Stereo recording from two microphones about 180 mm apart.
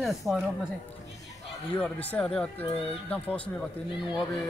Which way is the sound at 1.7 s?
10° left (ahead or behind).